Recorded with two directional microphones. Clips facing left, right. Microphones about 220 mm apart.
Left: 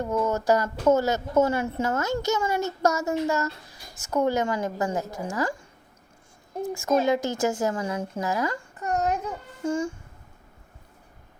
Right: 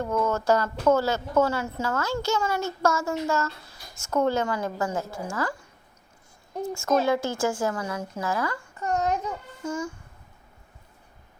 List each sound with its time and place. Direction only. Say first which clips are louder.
0.0 s a child's voice: even; 20° left (ahead or behind)
6.7 s a child's voice: left 1 dB; 15° left (ahead or behind)
7.9 s speech: left 2 dB; 30° left (ahead or behind)
8.8 s a sound: even; 35° left (ahead or behind)
9.6 s speech: left 4 dB; 30° left (ahead or behind)